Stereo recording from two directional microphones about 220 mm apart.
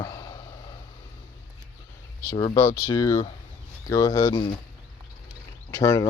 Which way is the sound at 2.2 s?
15° left (ahead or behind).